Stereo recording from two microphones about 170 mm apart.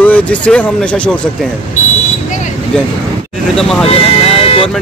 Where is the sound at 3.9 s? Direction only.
35° left (ahead or behind).